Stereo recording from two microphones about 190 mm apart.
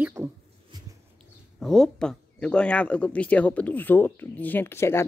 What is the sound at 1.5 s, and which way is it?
Speech, centre (ahead or behind).